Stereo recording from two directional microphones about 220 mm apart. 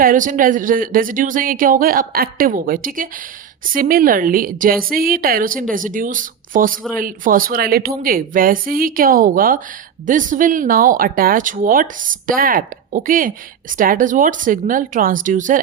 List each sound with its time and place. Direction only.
0.0 s speech: 35° right (ahead or behind)